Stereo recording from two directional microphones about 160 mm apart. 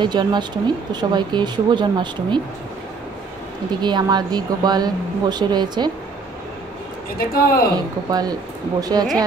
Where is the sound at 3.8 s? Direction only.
25° right (ahead or behind).